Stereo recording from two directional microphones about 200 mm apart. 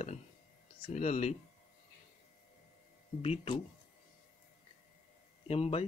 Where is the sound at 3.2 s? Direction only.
30° left (ahead or behind).